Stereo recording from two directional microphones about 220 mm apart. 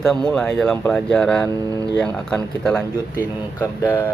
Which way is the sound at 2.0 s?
5° left (ahead or behind).